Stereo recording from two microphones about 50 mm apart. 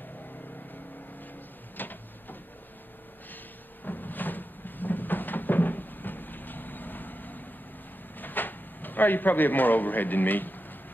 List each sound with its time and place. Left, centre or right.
1.8 s printer: left
3.8 s cupboard open or close: left
8.2 s drawer open or close: left